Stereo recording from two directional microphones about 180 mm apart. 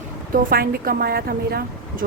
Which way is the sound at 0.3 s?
55° right (ahead or behind).